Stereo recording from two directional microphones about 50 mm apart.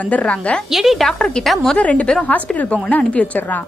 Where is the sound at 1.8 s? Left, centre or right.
Left.